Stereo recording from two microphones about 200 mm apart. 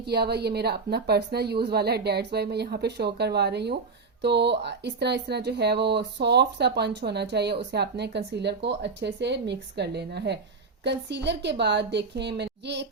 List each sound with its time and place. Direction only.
0.0 s a woman's voice: 55° right (ahead or behind)